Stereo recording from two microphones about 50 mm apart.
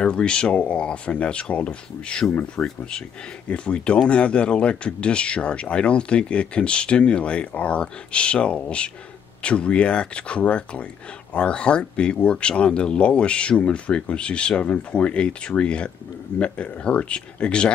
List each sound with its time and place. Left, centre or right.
0.0 s speech: centre